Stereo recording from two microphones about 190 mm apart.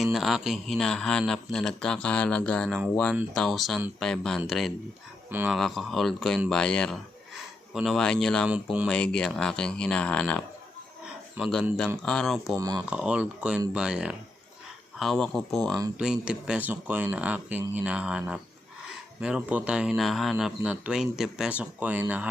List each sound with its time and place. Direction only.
0.0 s speech: centre (ahead or behind)
5.3 s speech: 10° right (ahead or behind)
5.5 s speech: centre (ahead or behind)
8.9 s speech: 5° left (ahead or behind)
11.4 s speech: 10° right (ahead or behind)
12.0 s speech: centre (ahead or behind)
12.5 s speech: 20° right (ahead or behind)
12.9 s speech: 5° right (ahead or behind)